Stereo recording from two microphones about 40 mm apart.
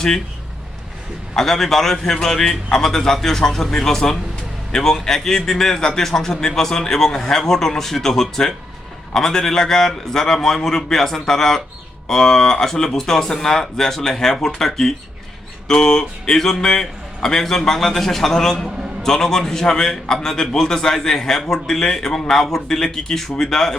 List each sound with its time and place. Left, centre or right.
1.4 s speech: centre